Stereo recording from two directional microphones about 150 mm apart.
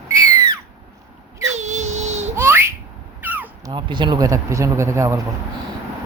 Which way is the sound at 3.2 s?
10° right (ahead or behind).